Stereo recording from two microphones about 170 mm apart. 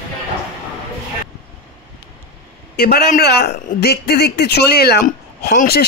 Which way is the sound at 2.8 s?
70° left (ahead or behind).